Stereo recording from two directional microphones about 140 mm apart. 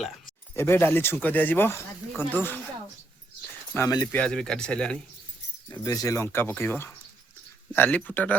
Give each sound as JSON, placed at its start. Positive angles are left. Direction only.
{"t": 0.5, "sound": "speech", "side_deg": 15}
{"t": 3.8, "sound": "speech", "side_deg": 25}
{"t": 4.1, "sound": "speech", "side_deg": 5}
{"t": 5.8, "sound": "speech", "side_deg": 25}